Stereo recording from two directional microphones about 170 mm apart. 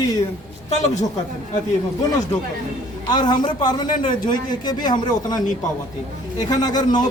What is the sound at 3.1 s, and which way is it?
A man's voice, 25° left (ahead or behind).